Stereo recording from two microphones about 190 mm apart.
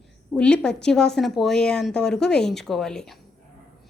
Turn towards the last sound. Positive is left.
turn(degrees=5)  # may be behind; listen again after turning